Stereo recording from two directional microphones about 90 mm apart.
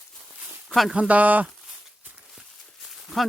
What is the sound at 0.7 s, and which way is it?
Speech, centre (ahead or behind).